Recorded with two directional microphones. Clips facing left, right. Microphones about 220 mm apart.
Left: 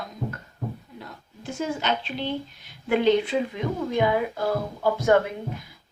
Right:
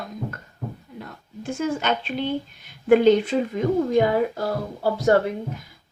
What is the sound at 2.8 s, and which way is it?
A woman's voice, 45° right (ahead or behind).